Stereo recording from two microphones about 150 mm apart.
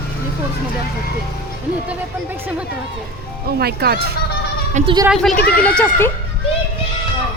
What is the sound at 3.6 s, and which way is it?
Speech, 90° right.